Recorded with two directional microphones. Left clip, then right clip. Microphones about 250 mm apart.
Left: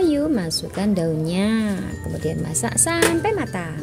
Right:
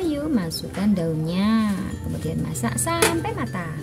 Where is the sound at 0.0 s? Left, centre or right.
Left.